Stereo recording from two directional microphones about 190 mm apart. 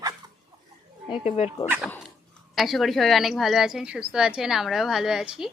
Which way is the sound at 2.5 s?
Centre (ahead or behind).